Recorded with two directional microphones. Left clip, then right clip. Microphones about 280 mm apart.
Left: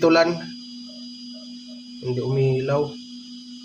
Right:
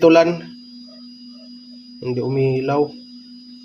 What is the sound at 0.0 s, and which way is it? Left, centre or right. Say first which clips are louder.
Speech: right 5 dB; right.